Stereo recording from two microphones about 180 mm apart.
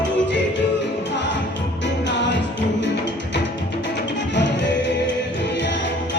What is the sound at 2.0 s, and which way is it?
Music, 80° left.